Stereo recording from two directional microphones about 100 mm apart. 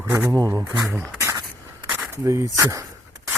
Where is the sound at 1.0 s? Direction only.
25° right (ahead or behind).